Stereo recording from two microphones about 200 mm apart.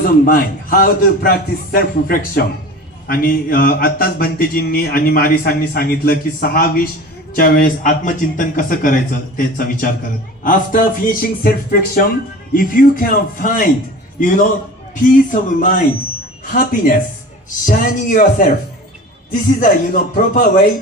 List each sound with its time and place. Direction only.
0.0 s a man's voice: 45° left (ahead or behind)
14.9 s a man's voice: 40° left (ahead or behind)